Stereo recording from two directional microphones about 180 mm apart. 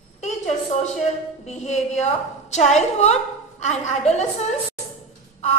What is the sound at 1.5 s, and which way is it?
A woman's voice, 40° left (ahead or behind).